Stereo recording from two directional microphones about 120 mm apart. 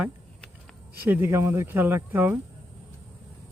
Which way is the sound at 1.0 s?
15° right (ahead or behind).